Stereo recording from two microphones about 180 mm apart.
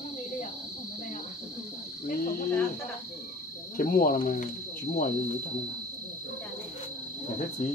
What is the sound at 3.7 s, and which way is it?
Speech, 50° left (ahead or behind).